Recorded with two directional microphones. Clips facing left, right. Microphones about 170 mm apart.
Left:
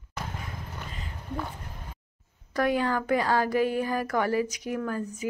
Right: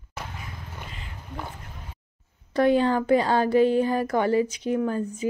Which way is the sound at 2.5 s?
25° right (ahead or behind).